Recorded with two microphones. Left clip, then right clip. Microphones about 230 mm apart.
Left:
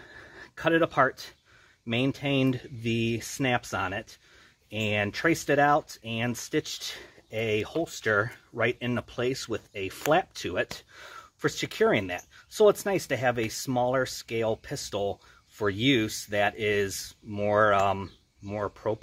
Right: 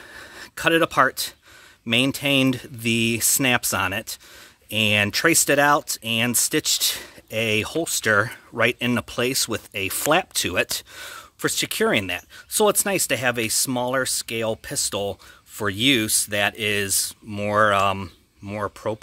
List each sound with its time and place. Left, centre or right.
0.1 s gasp: right
1.9 s speech: right